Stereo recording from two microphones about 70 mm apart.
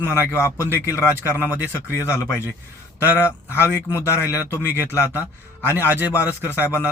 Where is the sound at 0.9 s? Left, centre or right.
Left.